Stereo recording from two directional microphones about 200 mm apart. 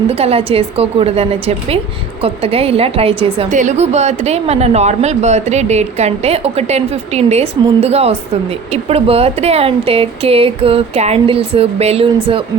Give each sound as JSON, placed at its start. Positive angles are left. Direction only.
{"t": 0.1, "sound": "a woman's voice", "side_deg": -30}
{"t": 3.5, "sound": "speech", "side_deg": -35}